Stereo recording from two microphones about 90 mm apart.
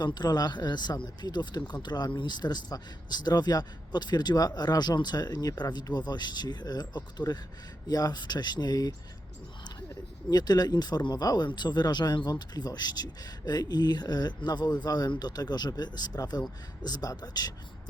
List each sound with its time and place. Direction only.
0.0 s speech: 50° left (ahead or behind)
10.2 s speech: 45° left (ahead or behind)